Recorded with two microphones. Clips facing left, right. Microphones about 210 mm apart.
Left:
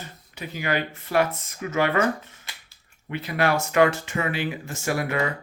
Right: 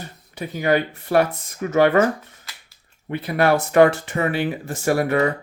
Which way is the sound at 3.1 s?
40° right (ahead or behind).